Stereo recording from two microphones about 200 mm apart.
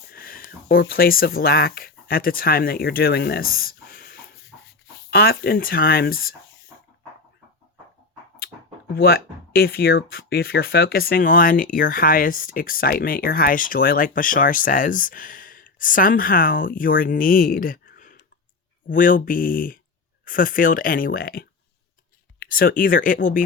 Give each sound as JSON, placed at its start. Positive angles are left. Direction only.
{"t": 0.1, "sound": "a sound", "side_deg": 45}
{"t": 0.9, "sound": "speech", "side_deg": 50}
{"t": 8.9, "sound": "speech", "side_deg": 50}
{"t": 22.5, "sound": "speech", "side_deg": 45}